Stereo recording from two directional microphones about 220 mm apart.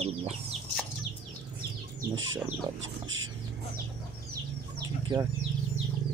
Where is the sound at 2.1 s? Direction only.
60° right (ahead or behind).